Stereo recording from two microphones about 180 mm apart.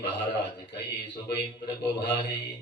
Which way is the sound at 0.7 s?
70° left (ahead or behind).